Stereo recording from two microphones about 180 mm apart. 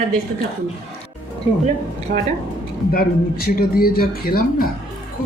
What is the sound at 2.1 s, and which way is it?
Speech, 60° right (ahead or behind).